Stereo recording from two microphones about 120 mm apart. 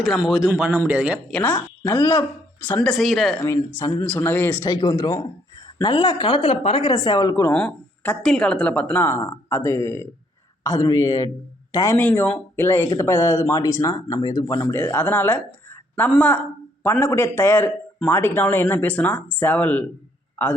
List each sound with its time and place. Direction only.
0.0 s a man's voice: centre (ahead or behind)
0.5 s a man's voice: 20° right (ahead or behind)
1.3 s a man's voice: 10° left (ahead or behind)
2.8 s a man's voice: centre (ahead or behind)
3.3 s speech: 25° left (ahead or behind)
4.2 s a man's voice: 15° left (ahead or behind)
4.7 s speech: 35° left (ahead or behind)
7.5 s a man's voice: 10° left (ahead or behind); by 11.9 s 25° left (ahead or behind)
11.9 s a man's voice: 15° left (ahead or behind)